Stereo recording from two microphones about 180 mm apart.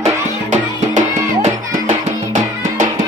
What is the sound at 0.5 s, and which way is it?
Music, 40° right (ahead or behind).